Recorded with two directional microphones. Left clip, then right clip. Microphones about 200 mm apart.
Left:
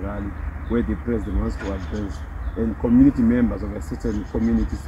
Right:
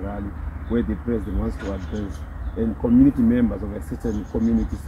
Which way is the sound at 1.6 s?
35° right (ahead or behind).